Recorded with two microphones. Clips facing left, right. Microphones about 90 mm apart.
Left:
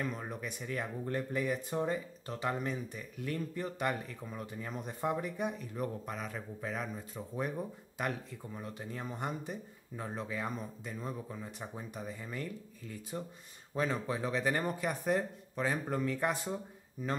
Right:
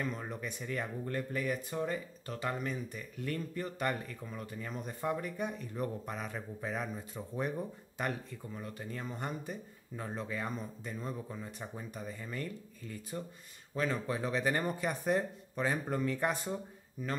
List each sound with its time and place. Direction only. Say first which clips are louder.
0.0 s a man's voice: even; 10° left (ahead or behind)
13.7 s speech: even; 15° left (ahead or behind)